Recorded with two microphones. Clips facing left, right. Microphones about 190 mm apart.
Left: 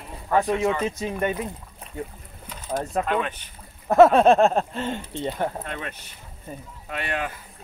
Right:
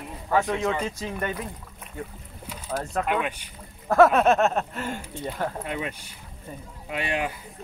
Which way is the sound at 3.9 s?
25° left (ahead or behind).